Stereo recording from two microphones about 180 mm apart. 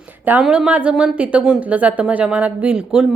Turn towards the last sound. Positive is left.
turn(degrees=-5)  # may be behind; listen again after turning